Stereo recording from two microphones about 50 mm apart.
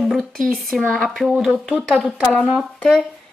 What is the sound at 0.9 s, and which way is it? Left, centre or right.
Speech, centre.